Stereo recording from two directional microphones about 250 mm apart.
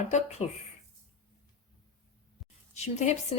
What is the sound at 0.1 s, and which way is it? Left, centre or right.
Speech, left.